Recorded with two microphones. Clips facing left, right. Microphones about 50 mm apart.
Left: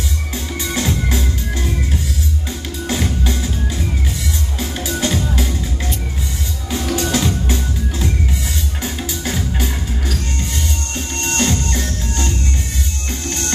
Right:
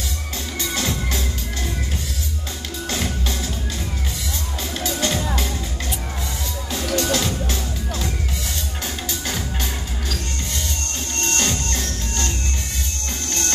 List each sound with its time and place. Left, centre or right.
0.7 s music: centre
2.9 s music: centre
4.6 s music: centre
6.9 s music: centre
8.8 s music: centre
11.1 s music: centre